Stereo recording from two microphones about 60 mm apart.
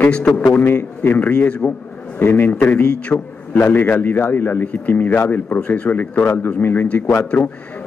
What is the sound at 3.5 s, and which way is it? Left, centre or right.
Speech, left.